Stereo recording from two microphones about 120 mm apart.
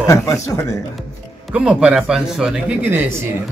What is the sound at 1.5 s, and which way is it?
Speech, 10° right (ahead or behind).